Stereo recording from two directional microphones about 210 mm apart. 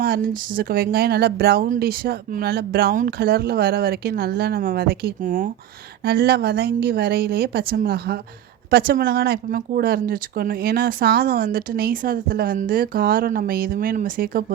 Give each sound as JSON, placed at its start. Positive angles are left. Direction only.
{"t": 0.0, "sound": "speech", "side_deg": -45}